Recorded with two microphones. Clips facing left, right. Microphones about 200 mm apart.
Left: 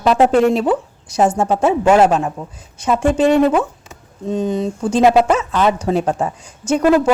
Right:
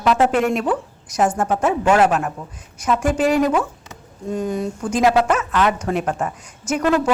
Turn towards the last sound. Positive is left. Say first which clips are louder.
# left 5 dB
turn(degrees=30)  # may be behind; listen again after turning